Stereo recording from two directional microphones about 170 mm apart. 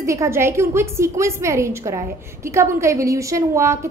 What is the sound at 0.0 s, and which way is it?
A woman's voice, 15° right (ahead or behind).